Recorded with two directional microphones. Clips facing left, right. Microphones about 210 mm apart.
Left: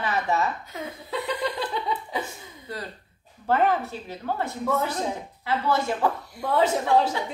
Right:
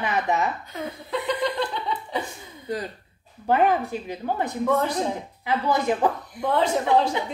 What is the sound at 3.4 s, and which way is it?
A woman's voice, 15° right (ahead or behind).